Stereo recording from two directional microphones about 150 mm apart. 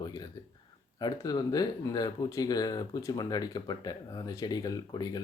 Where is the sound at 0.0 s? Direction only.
25° left (ahead or behind).